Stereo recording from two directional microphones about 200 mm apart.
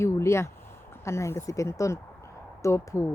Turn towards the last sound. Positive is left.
turn(degrees=15)  # may be behind; listen again after turning